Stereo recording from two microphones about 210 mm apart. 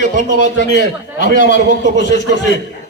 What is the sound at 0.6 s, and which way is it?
Speech, 55° left (ahead or behind).